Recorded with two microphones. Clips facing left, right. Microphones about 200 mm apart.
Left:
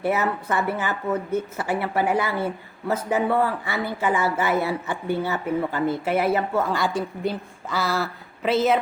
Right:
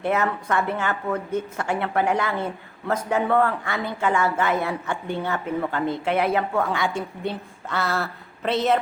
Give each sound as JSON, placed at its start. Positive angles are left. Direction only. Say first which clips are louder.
{"t": 0.0, "sound": "a woman's voice", "louder": "even", "side_deg": 5}